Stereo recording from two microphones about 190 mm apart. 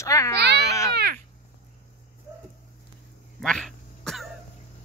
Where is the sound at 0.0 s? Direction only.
15° left (ahead or behind).